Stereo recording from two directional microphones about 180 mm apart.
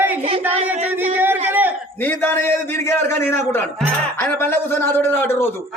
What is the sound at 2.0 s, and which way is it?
Speech, 10° left (ahead or behind).